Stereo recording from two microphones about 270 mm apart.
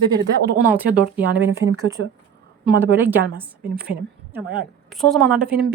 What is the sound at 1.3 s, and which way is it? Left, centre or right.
Speech, right.